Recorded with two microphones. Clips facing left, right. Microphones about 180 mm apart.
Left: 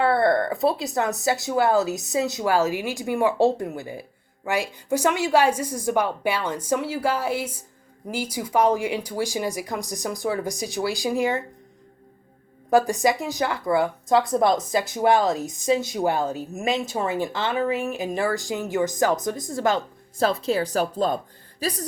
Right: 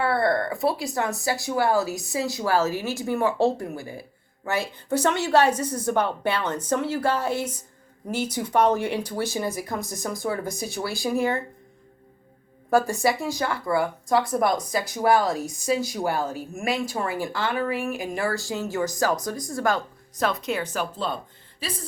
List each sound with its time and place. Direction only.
0.0 s speech: 20° left (ahead or behind)
12.7 s speech: 15° left (ahead or behind); by 21.2 s 45° left (ahead or behind)